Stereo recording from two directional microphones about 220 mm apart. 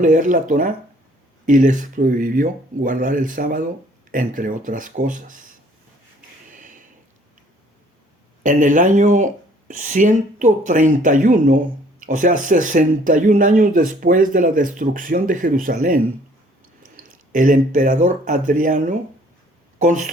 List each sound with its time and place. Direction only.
0.0 s speech: 35° right (ahead or behind)
8.4 s speech: 35° right (ahead or behind)